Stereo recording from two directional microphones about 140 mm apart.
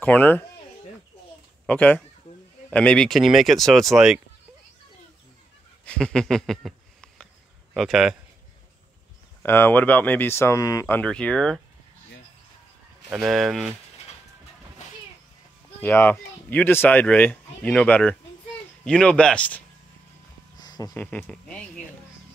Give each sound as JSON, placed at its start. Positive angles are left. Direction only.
{"t": 0.0, "sound": "speech", "side_deg": 10}
{"t": 1.7, "sound": "speech", "side_deg": 10}
{"t": 5.9, "sound": "speech", "side_deg": 5}
{"t": 9.4, "sound": "speech", "side_deg": 15}
{"t": 11.0, "sound": "speech", "side_deg": 10}
{"t": 13.1, "sound": "speech", "side_deg": 0}
{"t": 15.8, "sound": "speech", "side_deg": 15}
{"t": 20.5, "sound": "a sound", "side_deg": 30}
{"t": 20.9, "sound": "speech", "side_deg": 10}